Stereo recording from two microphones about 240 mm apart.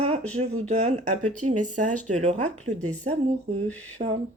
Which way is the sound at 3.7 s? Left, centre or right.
Centre.